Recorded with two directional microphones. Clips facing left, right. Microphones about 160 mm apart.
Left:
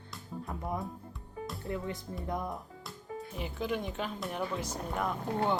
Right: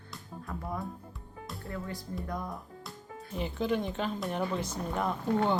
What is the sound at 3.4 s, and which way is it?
Speech, 10° left (ahead or behind).